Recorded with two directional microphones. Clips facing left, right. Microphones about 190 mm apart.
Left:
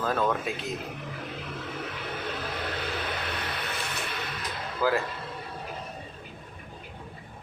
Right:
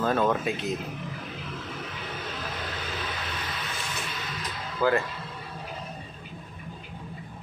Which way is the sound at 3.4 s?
60° left (ahead or behind).